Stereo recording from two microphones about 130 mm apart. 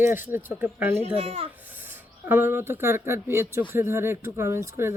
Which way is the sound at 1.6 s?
15° right (ahead or behind).